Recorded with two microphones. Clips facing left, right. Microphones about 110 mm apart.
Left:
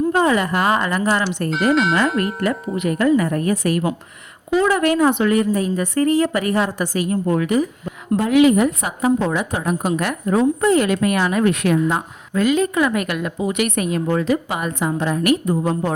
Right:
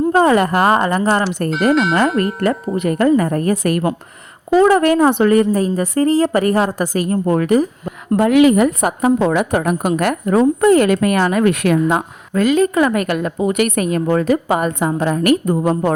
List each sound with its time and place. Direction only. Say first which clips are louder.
0.1 s a woman's voice: right 4 dB; 40° right (ahead or behind)
1.7 s speech: right 1 dB; centre (ahead or behind)
2.4 s a woman's voice: right 3 dB; 45° right (ahead or behind)
4.5 s a woman's voice: right 5 dB; 40° right (ahead or behind)
8.1 s a woman's voice: right 3 dB; 60° right (ahead or behind)